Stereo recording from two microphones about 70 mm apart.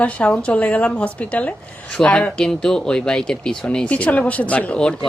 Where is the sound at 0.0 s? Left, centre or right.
Centre.